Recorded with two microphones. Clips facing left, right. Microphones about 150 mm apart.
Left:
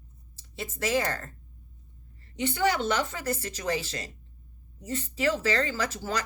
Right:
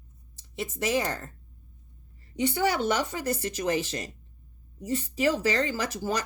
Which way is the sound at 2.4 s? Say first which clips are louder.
Right 1 dB; 15° right (ahead or behind).